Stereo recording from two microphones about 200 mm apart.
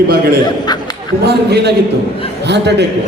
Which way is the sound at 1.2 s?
55° right (ahead or behind).